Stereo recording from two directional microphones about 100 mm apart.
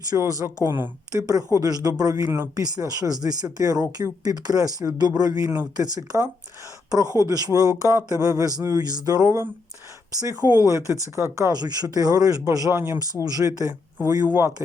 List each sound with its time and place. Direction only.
0.1 s speech: 35° right (ahead or behind)
0.4 s speech: 25° right (ahead or behind)
1.1 s speech: 35° right (ahead or behind)